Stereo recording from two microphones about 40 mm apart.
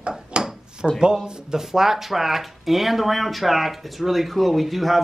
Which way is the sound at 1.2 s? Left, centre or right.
Right.